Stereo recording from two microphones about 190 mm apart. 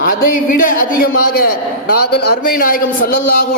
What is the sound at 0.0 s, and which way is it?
A man's voice, 50° left (ahead or behind).